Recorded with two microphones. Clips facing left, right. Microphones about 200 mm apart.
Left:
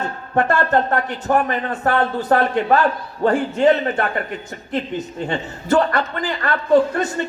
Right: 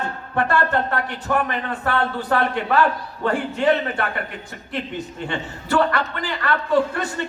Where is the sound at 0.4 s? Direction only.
40° left (ahead or behind).